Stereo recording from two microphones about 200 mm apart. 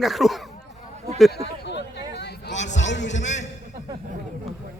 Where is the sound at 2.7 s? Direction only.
65° left (ahead or behind).